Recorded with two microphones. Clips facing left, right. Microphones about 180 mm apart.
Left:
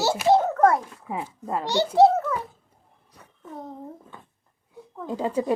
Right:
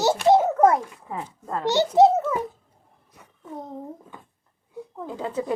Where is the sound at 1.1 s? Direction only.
15° left (ahead or behind).